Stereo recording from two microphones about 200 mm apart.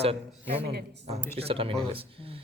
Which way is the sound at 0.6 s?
55° right (ahead or behind).